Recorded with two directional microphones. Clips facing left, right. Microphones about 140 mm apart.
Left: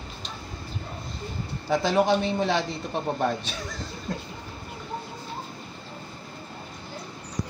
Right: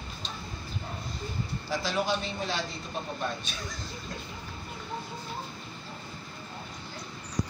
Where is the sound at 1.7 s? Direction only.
60° left (ahead or behind).